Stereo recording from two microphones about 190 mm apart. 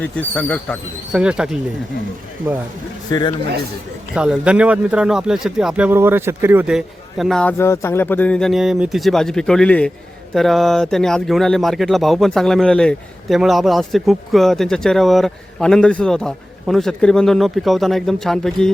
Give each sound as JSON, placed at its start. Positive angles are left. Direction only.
{"t": 0.0, "sound": "speech", "side_deg": 5}
{"t": 1.1, "sound": "speech", "side_deg": -5}
{"t": 3.1, "sound": "speech", "side_deg": 20}
{"t": 4.1, "sound": "speech", "side_deg": -5}